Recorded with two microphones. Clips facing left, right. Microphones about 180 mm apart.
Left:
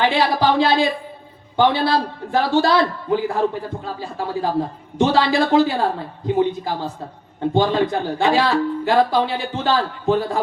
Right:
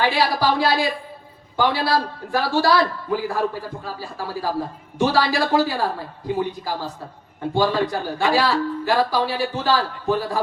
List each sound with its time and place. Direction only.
0.0 s speech: 20° left (ahead or behind)